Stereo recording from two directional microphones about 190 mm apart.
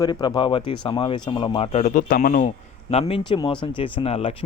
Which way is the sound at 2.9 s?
30° left (ahead or behind).